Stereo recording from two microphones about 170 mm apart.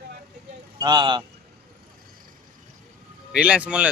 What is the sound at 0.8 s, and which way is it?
Speech, 25° right (ahead or behind).